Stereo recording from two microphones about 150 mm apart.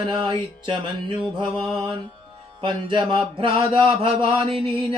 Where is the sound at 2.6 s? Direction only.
35° right (ahead or behind).